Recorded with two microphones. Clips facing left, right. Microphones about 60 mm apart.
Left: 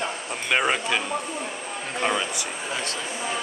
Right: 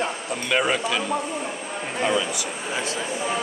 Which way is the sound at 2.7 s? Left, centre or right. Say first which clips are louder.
Right 3 dB; centre.